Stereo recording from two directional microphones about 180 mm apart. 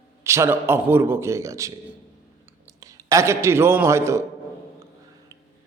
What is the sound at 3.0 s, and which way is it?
Speech, 15° right (ahead or behind).